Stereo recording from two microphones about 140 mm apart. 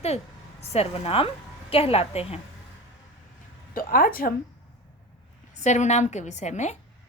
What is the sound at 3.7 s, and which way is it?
Speech, 90° left.